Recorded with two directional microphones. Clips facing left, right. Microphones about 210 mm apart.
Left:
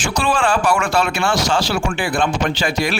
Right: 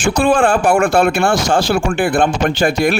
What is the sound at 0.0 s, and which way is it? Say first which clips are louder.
Speech: right 6 dB; 55° right (ahead or behind).